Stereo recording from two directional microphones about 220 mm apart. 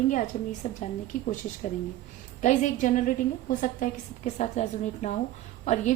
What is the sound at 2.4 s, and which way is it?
A woman's voice, 35° left (ahead or behind).